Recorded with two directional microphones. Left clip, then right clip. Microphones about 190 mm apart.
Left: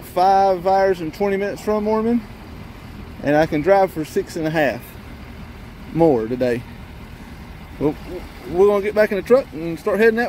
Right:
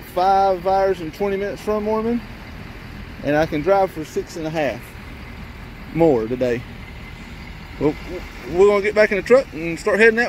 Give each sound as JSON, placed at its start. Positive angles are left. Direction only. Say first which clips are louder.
{"t": 0.1, "sound": "speech", "louder": "left 1 dB", "side_deg": 20}
{"t": 3.3, "sound": "speech", "louder": "left 2 dB", "side_deg": 20}
{"t": 5.9, "sound": "speech", "louder": "even", "side_deg": 5}
{"t": 8.5, "sound": "speech", "louder": "right 1 dB", "side_deg": 5}